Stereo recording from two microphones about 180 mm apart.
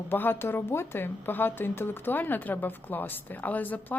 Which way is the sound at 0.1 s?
10° left (ahead or behind).